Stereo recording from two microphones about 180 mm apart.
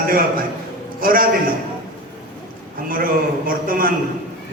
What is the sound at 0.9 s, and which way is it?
Speech, 50° right (ahead or behind).